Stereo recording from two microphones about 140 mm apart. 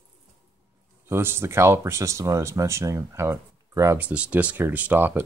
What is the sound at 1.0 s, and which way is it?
Speech, 15° right (ahead or behind).